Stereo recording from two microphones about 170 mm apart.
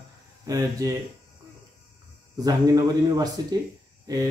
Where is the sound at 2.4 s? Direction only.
20° right (ahead or behind).